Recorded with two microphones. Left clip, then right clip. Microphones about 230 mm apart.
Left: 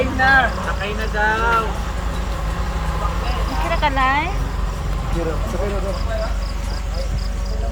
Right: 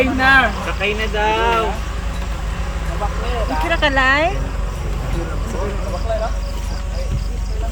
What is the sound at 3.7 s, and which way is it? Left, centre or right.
Speech, centre.